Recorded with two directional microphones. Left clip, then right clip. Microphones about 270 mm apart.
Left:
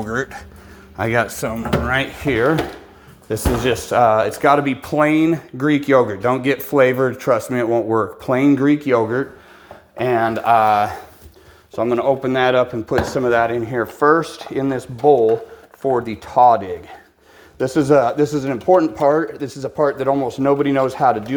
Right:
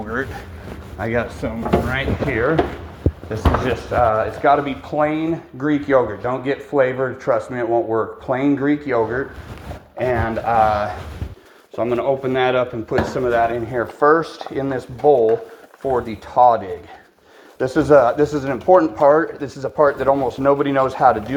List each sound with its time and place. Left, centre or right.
0.0 s speech: left